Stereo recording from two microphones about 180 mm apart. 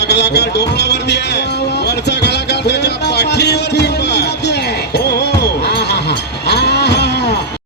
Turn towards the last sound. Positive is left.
turn(degrees=65)  # may be behind; listen again after turning